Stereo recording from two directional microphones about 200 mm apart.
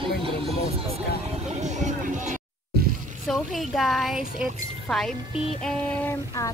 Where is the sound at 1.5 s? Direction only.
35° right (ahead or behind).